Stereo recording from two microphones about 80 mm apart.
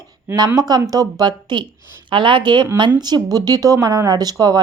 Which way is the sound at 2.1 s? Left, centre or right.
Right.